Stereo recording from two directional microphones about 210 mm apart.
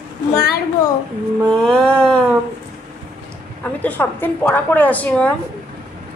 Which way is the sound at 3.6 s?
5° left (ahead or behind).